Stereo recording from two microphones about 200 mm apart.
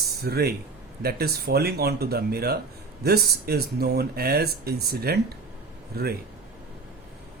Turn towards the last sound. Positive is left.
turn(degrees=-50)  # may be behind; listen again after turning